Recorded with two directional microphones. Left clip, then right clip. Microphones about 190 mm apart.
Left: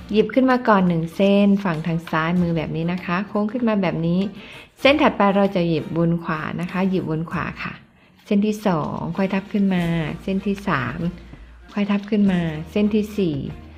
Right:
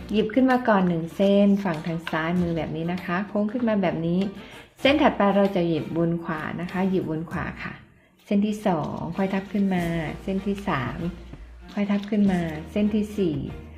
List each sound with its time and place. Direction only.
0.1 s a woman's voice: 25° left (ahead or behind)